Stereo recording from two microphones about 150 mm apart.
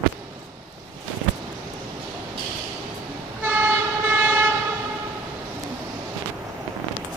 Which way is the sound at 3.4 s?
15° right (ahead or behind).